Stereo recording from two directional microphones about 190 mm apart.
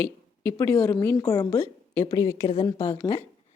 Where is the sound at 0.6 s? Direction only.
15° left (ahead or behind).